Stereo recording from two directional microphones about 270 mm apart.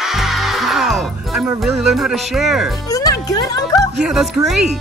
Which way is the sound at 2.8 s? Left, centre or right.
Centre.